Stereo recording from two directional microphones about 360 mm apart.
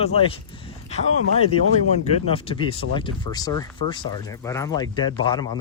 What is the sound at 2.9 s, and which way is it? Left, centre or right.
Speech, centre.